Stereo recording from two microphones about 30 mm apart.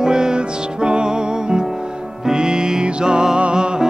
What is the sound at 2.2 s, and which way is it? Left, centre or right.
Music, right.